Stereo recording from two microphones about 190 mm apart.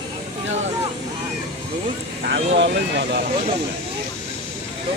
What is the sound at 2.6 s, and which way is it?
Speech, 65° right (ahead or behind).